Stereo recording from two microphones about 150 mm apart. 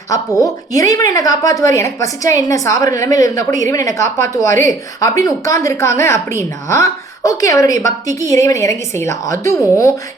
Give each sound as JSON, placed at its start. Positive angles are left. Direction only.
{"t": 0.3, "sound": "a woman's voice", "side_deg": 20}